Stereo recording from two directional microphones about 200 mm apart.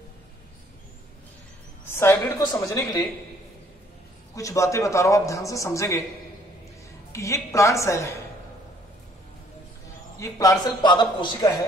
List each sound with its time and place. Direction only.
2.0 s a man's voice: 10° left (ahead or behind)
4.4 s a man's voice: 15° left (ahead or behind)
7.1 s a man's voice: 15° left (ahead or behind)
10.1 s a man's voice: 15° left (ahead or behind)